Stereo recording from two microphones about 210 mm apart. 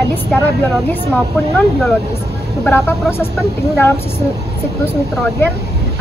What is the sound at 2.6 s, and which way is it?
Speech, 10° left (ahead or behind).